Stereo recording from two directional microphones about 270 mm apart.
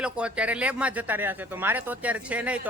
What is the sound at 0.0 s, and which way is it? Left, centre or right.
Speech, centre.